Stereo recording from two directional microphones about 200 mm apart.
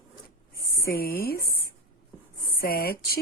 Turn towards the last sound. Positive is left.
turn(degrees=50)  # may be behind; listen again after turning